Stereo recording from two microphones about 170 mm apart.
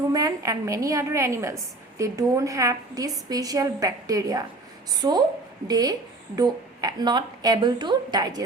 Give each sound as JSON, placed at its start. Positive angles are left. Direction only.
{"t": 0.1, "sound": "a woman's voice", "side_deg": -20}